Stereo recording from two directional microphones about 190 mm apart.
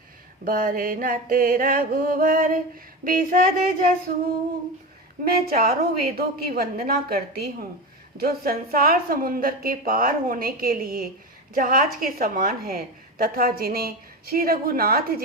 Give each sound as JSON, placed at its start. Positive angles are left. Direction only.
{"t": 0.4, "sound": "music", "side_deg": -50}
{"t": 5.2, "sound": "music", "side_deg": -55}